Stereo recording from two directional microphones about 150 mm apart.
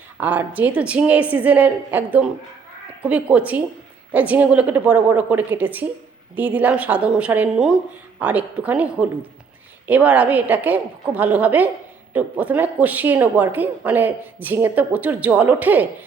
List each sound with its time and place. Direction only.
0.2 s speech: 10° right (ahead or behind)